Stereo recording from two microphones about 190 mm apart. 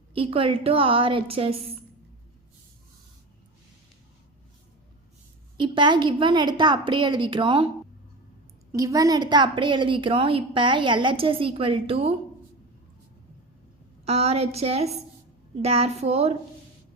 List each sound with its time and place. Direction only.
0.1 s a woman's voice: 30° right (ahead or behind)
5.5 s a woman's voice: 25° right (ahead or behind)
8.7 s a woman's voice: 20° right (ahead or behind)
14.0 s a woman's voice: 35° right (ahead or behind)